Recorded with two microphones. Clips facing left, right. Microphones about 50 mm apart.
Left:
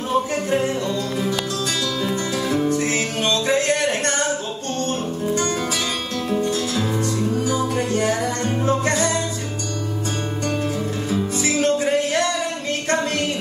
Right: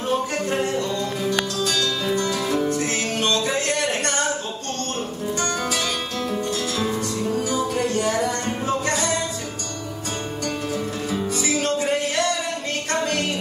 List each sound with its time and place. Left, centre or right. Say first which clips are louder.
1.8 s music: even; left
7.3 s music: left 2 dB; left
11.4 s music: left 4 dB; left